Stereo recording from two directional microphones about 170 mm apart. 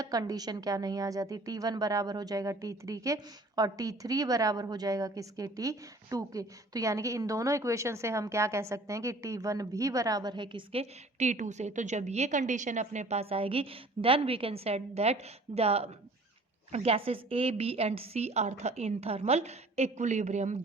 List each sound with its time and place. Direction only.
0.0 s a woman's voice: 20° right (ahead or behind); by 20.6 s 45° right (ahead or behind)